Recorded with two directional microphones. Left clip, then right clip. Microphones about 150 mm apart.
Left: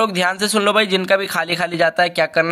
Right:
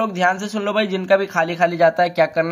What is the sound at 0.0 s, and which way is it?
A man's voice, 10° left (ahead or behind).